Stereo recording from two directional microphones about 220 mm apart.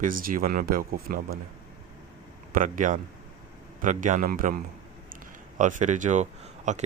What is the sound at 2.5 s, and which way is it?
Speech, 35° right (ahead or behind).